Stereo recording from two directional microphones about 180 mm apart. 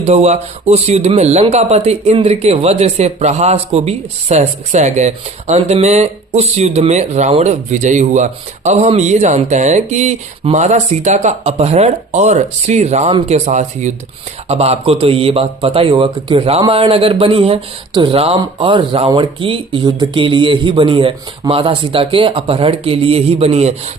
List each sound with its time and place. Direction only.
0.0 s speech: 35° right (ahead or behind)